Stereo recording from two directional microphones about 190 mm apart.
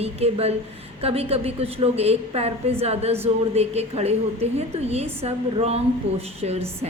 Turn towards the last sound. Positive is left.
turn(degrees=-35)  # may be behind; listen again after turning